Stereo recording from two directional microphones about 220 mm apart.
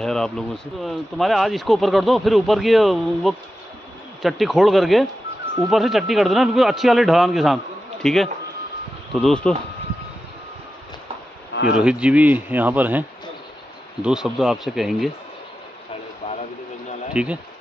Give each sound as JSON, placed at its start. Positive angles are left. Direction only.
{"t": 0.0, "sound": "a man's voice", "side_deg": 5}
{"t": 11.8, "sound": "speech", "side_deg": -5}
{"t": 14.0, "sound": "a man's voice", "side_deg": 0}
{"t": 16.2, "sound": "a sound", "side_deg": 30}
{"t": 17.1, "sound": "speech", "side_deg": -5}